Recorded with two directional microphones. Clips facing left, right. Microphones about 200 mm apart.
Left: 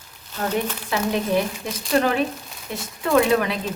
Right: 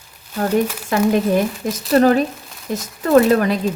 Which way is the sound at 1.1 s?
45° right (ahead or behind).